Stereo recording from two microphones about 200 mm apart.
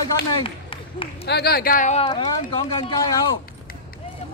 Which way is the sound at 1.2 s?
50° left (ahead or behind).